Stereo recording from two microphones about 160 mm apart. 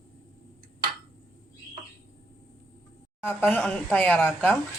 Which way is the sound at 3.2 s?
10° left (ahead or behind).